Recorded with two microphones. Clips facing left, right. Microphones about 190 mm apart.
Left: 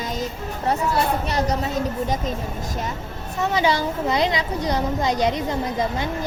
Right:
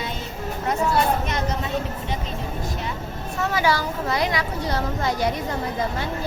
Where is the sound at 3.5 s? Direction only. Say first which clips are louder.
Left 2 dB; 20° left (ahead or behind).